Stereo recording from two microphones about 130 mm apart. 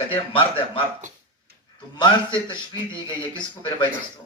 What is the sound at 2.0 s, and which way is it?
A man's voice, 35° left (ahead or behind).